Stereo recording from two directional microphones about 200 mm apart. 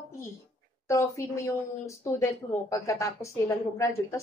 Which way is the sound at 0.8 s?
15° left (ahead or behind).